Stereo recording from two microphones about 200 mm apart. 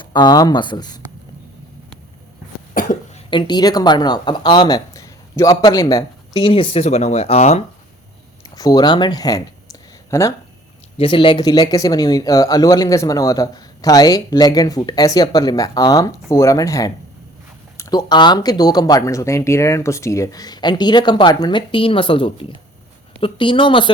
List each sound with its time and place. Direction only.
0.0 s speech: 25° left (ahead or behind)
2.8 s cough: 45° left (ahead or behind)
3.2 s speech: 25° left (ahead or behind)
8.4 s speech: 20° left (ahead or behind)
10.9 s speech: 25° left (ahead or behind)